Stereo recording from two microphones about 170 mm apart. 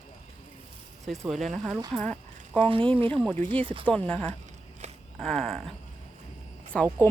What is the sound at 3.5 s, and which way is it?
Speech, 30° right (ahead or behind).